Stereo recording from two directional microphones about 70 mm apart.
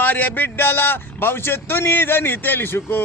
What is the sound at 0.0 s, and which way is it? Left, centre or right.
A man's voice, left.